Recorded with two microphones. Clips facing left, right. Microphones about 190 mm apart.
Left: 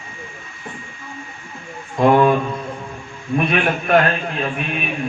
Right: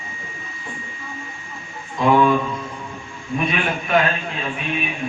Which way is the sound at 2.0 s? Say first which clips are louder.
Left 3 dB; 50° left (ahead or behind).